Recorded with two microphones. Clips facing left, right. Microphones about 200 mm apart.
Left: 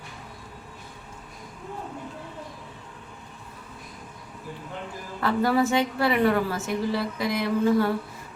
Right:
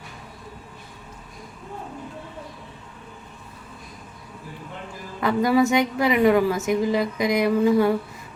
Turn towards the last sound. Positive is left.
turn(degrees=-15)  # may be behind; listen again after turning